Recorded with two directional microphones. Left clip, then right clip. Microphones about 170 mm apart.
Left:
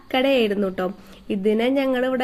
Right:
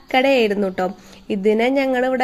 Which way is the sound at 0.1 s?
20° right (ahead or behind).